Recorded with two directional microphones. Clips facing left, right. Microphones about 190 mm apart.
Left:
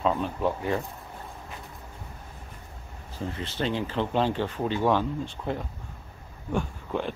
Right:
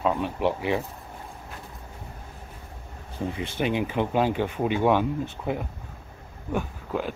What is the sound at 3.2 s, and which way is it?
Speech, 15° right (ahead or behind).